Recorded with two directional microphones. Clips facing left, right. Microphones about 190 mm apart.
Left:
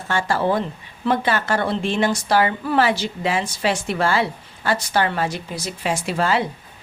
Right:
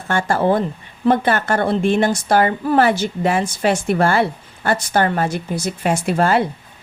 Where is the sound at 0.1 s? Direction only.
50° right (ahead or behind).